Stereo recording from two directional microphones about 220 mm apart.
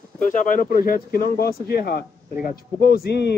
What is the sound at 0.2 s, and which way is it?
A man's voice, 35° left (ahead or behind).